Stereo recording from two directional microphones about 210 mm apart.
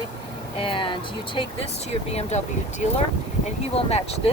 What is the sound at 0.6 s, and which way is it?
Speech, 25° left (ahead or behind).